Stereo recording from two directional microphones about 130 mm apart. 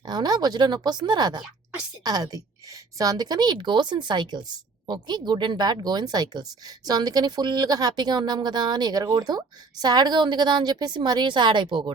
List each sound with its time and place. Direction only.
0.0 s a woman's voice: 35° right (ahead or behind)